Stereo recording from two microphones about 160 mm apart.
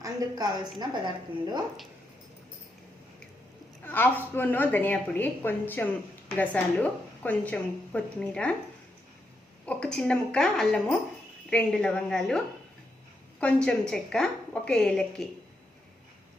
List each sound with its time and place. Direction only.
0.0 s a woman's voice: 25° right (ahead or behind)
3.8 s a woman's voice: 10° left (ahead or behind)
9.6 s a woman's voice: 5° left (ahead or behind)
13.4 s a woman's voice: 5° left (ahead or behind)